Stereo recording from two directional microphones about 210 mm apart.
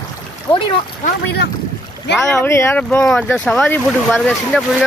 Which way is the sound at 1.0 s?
50° left (ahead or behind).